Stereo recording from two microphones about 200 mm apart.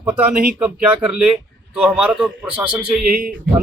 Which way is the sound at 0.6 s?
5° right (ahead or behind).